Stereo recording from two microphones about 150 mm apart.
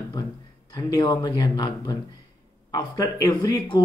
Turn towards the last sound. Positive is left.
turn(degrees=25)  # may be behind; listen again after turning